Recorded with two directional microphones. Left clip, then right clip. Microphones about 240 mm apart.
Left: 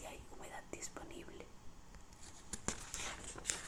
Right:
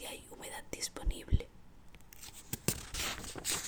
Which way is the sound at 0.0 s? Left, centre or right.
Right.